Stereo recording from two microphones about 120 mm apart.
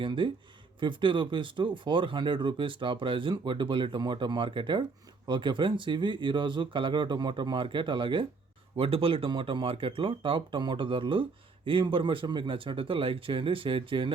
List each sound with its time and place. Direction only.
0.0 s speech: 45° right (ahead or behind)